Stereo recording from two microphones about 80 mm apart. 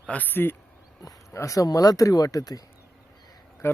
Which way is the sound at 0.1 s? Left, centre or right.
Left.